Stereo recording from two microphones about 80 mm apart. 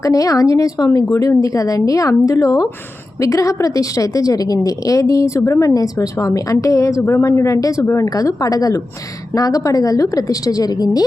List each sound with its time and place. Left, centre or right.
0.0 s a woman's voice: left